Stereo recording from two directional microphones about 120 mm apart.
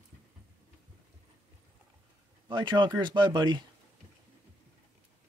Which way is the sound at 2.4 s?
40° right (ahead or behind).